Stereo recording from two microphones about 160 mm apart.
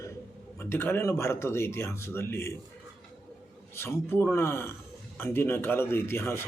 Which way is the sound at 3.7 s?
15° left (ahead or behind).